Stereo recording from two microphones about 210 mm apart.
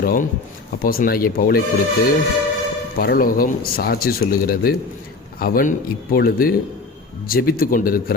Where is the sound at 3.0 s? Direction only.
45° left (ahead or behind).